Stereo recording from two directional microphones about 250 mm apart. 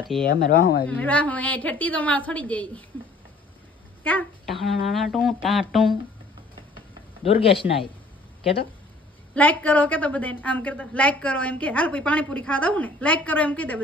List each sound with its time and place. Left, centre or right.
0.3 s speech: left
0.8 s a woman's voice: centre
4.0 s a woman's voice: centre
7.2 s speech: left
9.3 s a woman's voice: centre